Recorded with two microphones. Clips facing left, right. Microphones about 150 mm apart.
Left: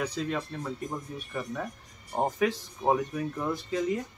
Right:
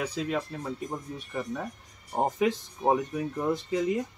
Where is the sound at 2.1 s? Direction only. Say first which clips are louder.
Right 1 dB; 15° right (ahead or behind).